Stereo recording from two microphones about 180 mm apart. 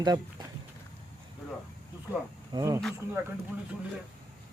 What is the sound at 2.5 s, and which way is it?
Speech, 15° right (ahead or behind).